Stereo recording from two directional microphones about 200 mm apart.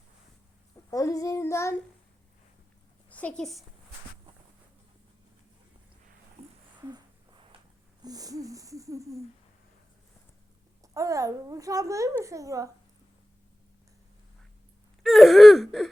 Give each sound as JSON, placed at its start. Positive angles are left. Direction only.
{"t": 0.9, "sound": "child singing", "side_deg": 15}
{"t": 3.1, "sound": "a woman's voice", "side_deg": 5}
{"t": 8.0, "sound": "a child's voice", "side_deg": -20}
{"t": 10.9, "sound": "a child's voice", "side_deg": -15}
{"t": 15.0, "sound": "gasp", "side_deg": 0}